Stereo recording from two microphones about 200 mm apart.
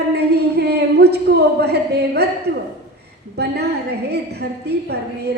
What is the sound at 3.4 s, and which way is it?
A woman's voice, 55° right (ahead or behind).